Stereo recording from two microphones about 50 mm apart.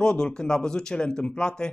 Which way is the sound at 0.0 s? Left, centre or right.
Centre.